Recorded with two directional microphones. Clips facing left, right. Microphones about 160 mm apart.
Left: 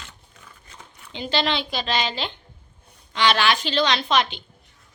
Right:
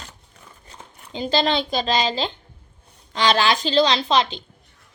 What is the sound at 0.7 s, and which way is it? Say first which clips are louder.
A woman's voice: right 4 dB; 35° right (ahead or behind).